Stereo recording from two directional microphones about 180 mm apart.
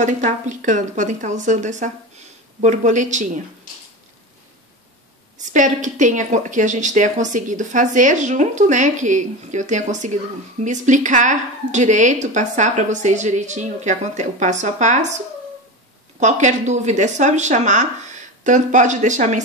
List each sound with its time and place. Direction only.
0.0 s speech: 45° right (ahead or behind)
5.5 s speech: 45° right (ahead or behind)
16.2 s speech: 40° right (ahead or behind)